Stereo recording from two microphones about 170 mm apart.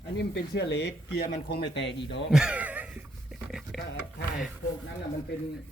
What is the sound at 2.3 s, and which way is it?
Pant, 5° right (ahead or behind).